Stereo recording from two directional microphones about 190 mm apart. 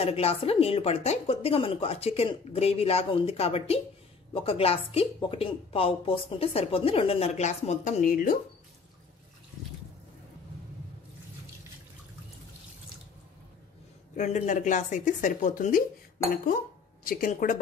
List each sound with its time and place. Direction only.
0.0 s a woman's voice: 30° left (ahead or behind)
14.1 s a woman's voice: 40° left (ahead or behind)
17.0 s a woman's voice: 50° left (ahead or behind)